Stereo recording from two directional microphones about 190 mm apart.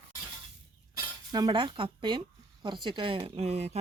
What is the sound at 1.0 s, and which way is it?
Speech, 20° right (ahead or behind).